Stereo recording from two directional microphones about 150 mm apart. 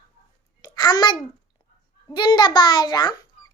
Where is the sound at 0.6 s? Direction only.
25° left (ahead or behind).